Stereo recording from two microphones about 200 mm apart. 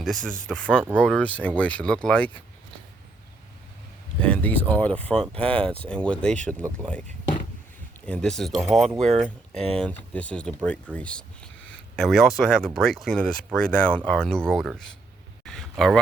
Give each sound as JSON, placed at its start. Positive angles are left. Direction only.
{"t": 0.0, "sound": "speech", "side_deg": 5}
{"t": 4.2, "sound": "a sound", "side_deg": 5}
{"t": 4.7, "sound": "speech", "side_deg": 10}
{"t": 5.4, "sound": "speech", "side_deg": -25}
{"t": 5.6, "sound": "speech", "side_deg": 5}
{"t": 8.0, "sound": "speech", "side_deg": 5}
{"t": 15.4, "sound": "a sound", "side_deg": 5}